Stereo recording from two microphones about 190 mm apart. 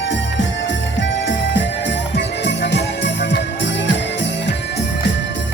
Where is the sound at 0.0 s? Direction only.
70° left (ahead or behind).